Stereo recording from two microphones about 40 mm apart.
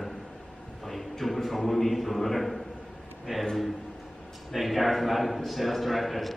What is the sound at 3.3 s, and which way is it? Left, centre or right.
Speech, centre.